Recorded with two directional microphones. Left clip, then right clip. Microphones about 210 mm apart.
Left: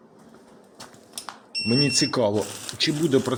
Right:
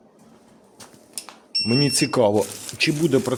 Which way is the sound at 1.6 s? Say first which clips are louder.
Even; 20° right (ahead or behind).